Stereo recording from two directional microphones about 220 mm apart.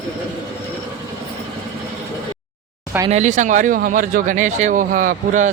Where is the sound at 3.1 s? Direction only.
35° right (ahead or behind).